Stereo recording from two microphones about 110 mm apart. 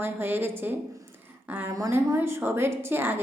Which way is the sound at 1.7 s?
30° right (ahead or behind).